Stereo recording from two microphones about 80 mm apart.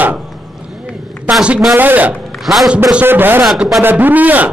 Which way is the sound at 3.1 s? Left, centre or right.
Right.